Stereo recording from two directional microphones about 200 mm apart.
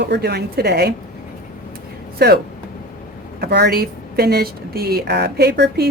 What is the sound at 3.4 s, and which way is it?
Speech, 55° right (ahead or behind).